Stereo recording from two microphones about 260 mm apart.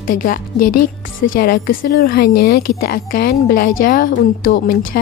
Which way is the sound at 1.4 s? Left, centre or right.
Left.